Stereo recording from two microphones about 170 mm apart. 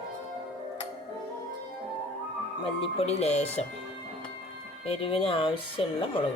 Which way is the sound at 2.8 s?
35° left (ahead or behind).